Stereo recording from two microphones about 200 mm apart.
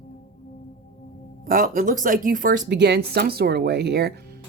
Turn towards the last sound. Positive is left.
turn(degrees=-55)  # may be behind; listen again after turning